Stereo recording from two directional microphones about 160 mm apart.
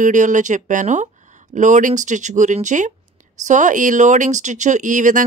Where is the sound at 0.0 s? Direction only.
50° right (ahead or behind).